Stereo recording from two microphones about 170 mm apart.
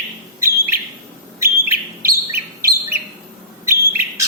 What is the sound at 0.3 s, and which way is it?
Bird, 15° right (ahead or behind).